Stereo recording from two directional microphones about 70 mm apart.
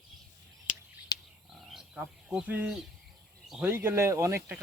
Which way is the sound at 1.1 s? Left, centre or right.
Left.